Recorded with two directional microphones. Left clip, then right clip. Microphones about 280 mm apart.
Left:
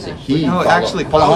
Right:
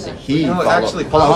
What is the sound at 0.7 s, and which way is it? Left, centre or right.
Speech, centre.